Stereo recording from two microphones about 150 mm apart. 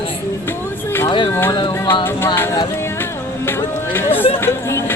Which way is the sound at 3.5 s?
15° left (ahead or behind).